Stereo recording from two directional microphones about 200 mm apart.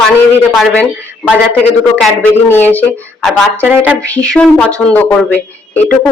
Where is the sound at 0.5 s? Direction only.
Centre (ahead or behind).